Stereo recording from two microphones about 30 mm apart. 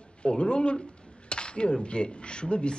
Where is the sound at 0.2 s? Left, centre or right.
Left.